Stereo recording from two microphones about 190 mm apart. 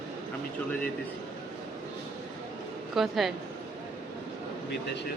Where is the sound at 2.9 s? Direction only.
Centre (ahead or behind).